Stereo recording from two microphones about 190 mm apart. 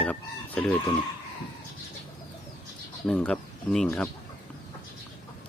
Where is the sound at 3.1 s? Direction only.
5° left (ahead or behind).